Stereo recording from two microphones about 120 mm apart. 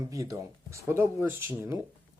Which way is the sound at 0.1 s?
30° right (ahead or behind).